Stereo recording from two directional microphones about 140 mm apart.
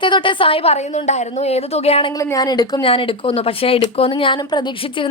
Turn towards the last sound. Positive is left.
turn(degrees=35)  # may be behind; listen again after turning